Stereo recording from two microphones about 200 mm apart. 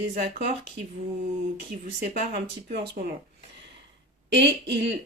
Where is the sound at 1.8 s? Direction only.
40° right (ahead or behind).